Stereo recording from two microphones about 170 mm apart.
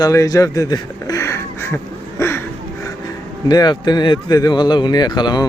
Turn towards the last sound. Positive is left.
turn(degrees=25)  # may be behind; listen again after turning